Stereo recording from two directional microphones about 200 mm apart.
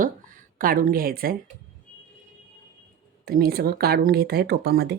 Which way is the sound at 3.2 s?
50° right (ahead or behind).